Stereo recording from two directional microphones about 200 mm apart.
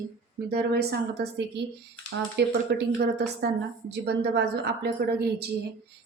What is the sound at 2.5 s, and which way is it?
A woman's voice, 55° right (ahead or behind).